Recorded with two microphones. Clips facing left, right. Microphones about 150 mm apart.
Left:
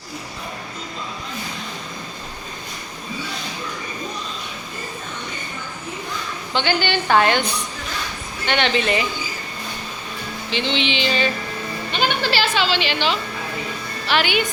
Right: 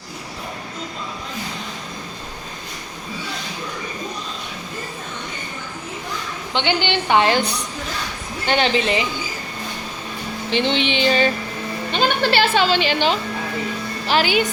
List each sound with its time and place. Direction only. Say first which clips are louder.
6.5 s a woman's voice: even; 20° right (ahead or behind)
8.4 s a woman's voice: right 1 dB; 35° right (ahead or behind)
10.5 s a woman's voice: right 3 dB; 55° right (ahead or behind)